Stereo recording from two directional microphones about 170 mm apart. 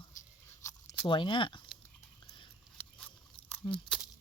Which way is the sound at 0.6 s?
20° left (ahead or behind).